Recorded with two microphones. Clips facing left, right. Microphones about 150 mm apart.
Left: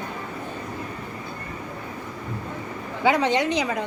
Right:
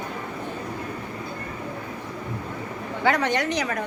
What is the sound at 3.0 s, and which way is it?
Speech, 15° left (ahead or behind).